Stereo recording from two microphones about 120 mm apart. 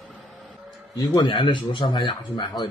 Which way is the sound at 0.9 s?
40° left (ahead or behind).